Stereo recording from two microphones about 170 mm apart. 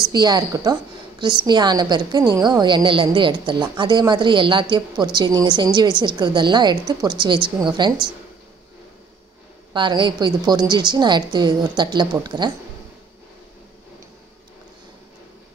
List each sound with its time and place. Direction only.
0.1 s a woman's voice: 25° right (ahead or behind)
9.8 s a woman's voice: 25° right (ahead or behind)